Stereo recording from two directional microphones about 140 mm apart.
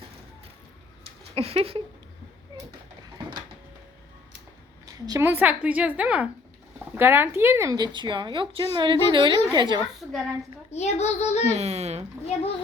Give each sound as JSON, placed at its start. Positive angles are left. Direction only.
{"t": 1.4, "sound": "a child's voice", "side_deg": -45}
{"t": 4.9, "sound": "a woman's voice", "side_deg": -25}
{"t": 5.2, "sound": "a woman's voice", "side_deg": -15}
{"t": 10.0, "sound": "a woman's voice", "side_deg": 0}
{"t": 10.7, "sound": "a child's voice", "side_deg": 50}
{"t": 11.5, "sound": "a child's voice", "side_deg": -50}